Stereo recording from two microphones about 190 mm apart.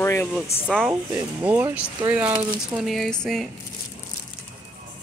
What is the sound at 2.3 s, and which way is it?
Speech, 20° right (ahead or behind).